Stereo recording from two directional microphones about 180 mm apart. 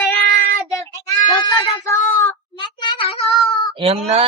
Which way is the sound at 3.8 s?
35° right (ahead or behind).